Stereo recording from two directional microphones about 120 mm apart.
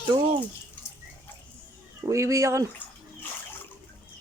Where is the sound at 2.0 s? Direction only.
25° right (ahead or behind).